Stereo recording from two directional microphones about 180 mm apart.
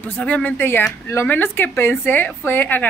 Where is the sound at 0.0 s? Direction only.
10° left (ahead or behind).